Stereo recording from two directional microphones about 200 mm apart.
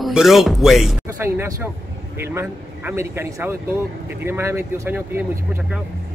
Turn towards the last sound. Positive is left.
turn(degrees=-10)  # may be behind; listen again after turning